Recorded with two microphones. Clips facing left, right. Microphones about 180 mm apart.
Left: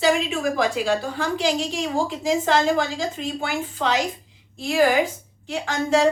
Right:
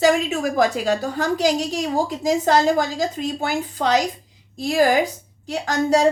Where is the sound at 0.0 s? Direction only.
45° right (ahead or behind).